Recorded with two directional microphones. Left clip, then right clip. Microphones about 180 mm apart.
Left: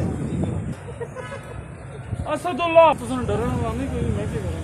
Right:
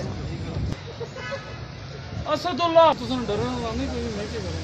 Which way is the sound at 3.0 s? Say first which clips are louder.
Left 1 dB; centre (ahead or behind).